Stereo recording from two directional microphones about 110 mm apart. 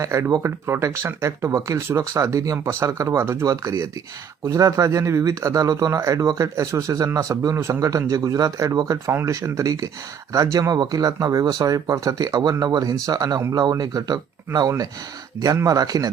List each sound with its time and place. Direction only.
0.0 s speech: 30° right (ahead or behind)